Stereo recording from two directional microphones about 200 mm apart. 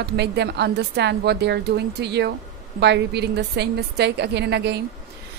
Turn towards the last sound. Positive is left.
turn(degrees=-55)  # may be behind; listen again after turning